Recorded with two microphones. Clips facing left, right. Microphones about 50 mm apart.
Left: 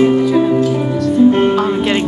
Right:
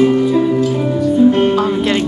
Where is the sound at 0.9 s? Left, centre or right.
Left.